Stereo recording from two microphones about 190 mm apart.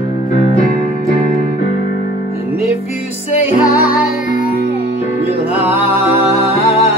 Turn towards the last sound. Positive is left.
turn(degrees=30)  # may be behind; listen again after turning